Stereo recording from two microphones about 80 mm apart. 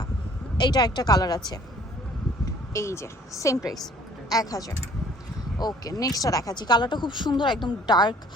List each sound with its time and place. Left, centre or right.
0.5 s speech: left
2.7 s speech: left